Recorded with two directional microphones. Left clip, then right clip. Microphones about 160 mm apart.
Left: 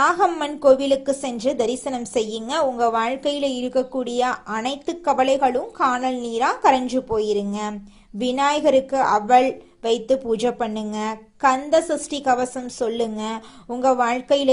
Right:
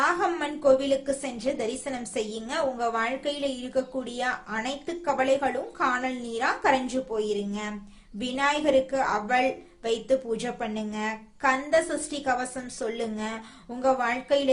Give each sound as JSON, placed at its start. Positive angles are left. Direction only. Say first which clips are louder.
{"t": 0.0, "sound": "a woman's voice", "louder": "left 7 dB", "side_deg": 35}